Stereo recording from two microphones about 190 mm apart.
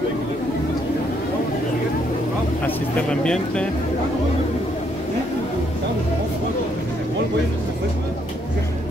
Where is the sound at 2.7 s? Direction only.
5° left (ahead or behind).